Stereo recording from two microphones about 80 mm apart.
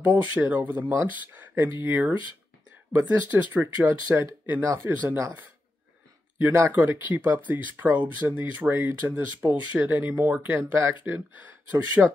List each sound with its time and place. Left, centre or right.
0.1 s speech: right
6.3 s speech: right
12.0 s speech: centre